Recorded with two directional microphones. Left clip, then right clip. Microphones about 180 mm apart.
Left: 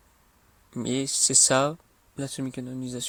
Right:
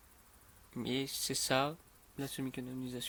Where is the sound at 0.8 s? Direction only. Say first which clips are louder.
Left 10 dB; 50° left (ahead or behind).